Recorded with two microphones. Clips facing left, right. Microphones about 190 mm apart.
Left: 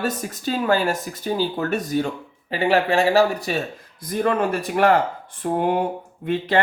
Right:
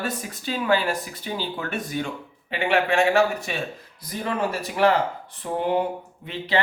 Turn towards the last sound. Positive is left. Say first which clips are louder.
# left 5 dB
turn(degrees=50)  # may be behind; listen again after turning